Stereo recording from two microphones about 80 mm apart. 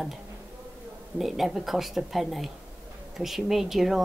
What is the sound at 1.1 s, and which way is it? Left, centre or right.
Speech, centre.